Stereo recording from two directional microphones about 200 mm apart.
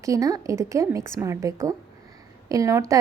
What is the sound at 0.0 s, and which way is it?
A woman's voice, 15° right (ahead or behind).